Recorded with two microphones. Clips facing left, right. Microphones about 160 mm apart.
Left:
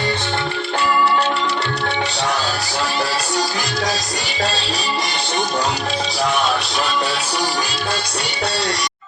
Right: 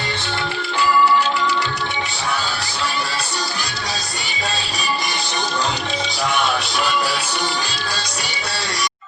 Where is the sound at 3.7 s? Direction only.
90° left.